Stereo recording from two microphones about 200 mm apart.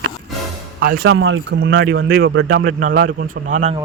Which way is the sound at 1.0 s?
75° right (ahead or behind).